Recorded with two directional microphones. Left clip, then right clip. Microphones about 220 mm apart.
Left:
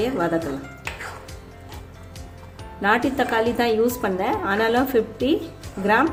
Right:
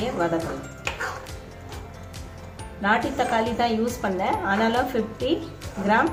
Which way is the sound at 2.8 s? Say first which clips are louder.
Left 2 dB; 40° left (ahead or behind).